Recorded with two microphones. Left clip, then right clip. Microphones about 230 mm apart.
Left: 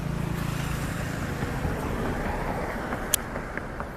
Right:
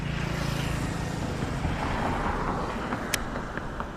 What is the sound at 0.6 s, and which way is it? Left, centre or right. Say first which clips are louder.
Vehicle: even; right.